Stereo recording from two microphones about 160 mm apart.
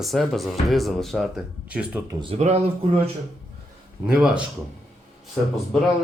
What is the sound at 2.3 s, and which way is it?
Speech, 45° right (ahead or behind).